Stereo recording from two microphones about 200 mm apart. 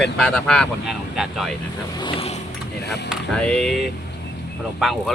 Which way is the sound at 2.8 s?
55° left (ahead or behind).